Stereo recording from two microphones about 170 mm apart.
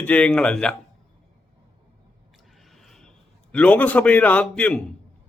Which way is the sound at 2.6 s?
Centre (ahead or behind).